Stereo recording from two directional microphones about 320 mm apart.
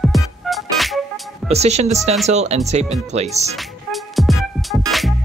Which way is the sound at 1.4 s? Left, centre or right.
Centre.